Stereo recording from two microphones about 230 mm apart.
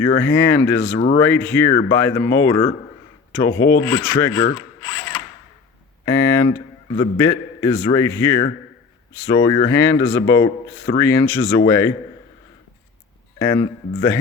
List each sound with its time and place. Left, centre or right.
0.0 s a man's voice: centre
4.8 s mechanisms: centre
6.1 s a man's voice: centre
13.4 s speech: left